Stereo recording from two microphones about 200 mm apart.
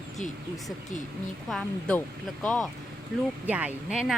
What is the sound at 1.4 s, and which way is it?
Speech, 5° left (ahead or behind).